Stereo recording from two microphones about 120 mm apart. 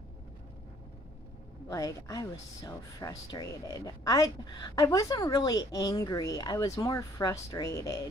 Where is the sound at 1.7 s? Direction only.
25° left (ahead or behind).